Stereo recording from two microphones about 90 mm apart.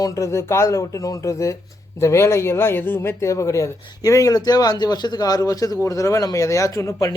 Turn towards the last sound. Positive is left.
turn(degrees=40)  # may be behind; listen again after turning